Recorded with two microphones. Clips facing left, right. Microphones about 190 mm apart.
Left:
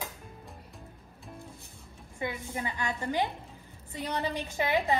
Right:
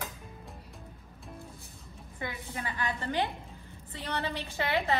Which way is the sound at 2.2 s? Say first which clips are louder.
Left 4 dB; 15° left (ahead or behind).